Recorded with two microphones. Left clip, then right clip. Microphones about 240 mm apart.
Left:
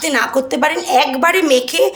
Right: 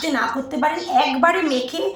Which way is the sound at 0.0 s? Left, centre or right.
Left.